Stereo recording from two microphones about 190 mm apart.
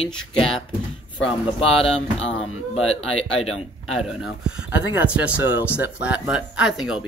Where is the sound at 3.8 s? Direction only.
Centre (ahead or behind).